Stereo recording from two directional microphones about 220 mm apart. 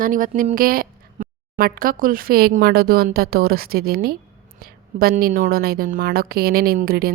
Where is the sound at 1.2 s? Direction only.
35° right (ahead or behind).